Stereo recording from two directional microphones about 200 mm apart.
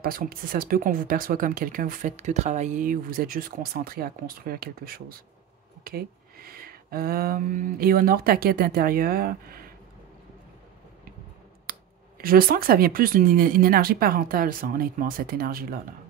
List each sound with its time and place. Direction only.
0.0 s speech: 45° right (ahead or behind)
12.2 s speech: 45° right (ahead or behind)